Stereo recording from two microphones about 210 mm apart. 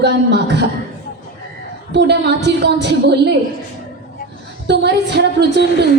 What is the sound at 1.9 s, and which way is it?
Speech, 55° right (ahead or behind).